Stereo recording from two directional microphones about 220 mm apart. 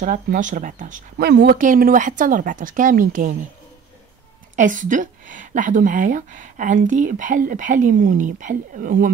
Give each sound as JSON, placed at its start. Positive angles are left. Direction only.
{"t": 0.0, "sound": "speech", "side_deg": -35}
{"t": 1.6, "sound": "speech", "side_deg": -40}
{"t": 4.6, "sound": "speech", "side_deg": -35}